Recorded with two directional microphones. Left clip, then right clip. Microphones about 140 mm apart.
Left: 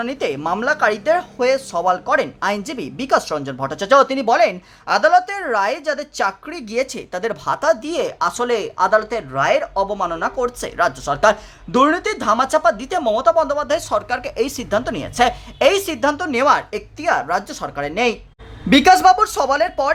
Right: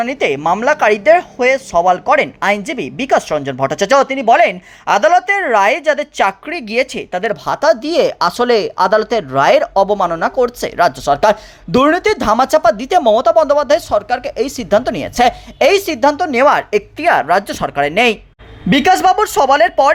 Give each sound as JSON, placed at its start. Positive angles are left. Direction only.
{"t": 0.0, "sound": "speech", "side_deg": -15}
{"t": 3.6, "sound": "speech", "side_deg": -25}
{"t": 4.0, "sound": "speech", "side_deg": -5}
{"t": 4.3, "sound": "speech", "side_deg": -15}
{"t": 4.9, "sound": "speech", "side_deg": -30}
{"t": 7.4, "sound": "speech", "side_deg": -20}
{"t": 9.3, "sound": "speech", "side_deg": -45}
{"t": 14.7, "sound": "speech", "side_deg": -25}
{"t": 18.7, "sound": "speech", "side_deg": -20}